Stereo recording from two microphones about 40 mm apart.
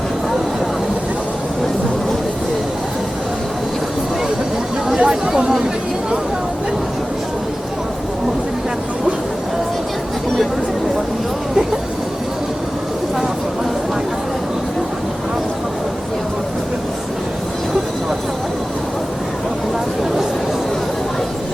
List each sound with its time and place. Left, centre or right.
4.9 s chatter: centre